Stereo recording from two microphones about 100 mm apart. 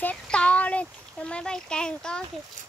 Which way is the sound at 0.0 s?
10° left (ahead or behind).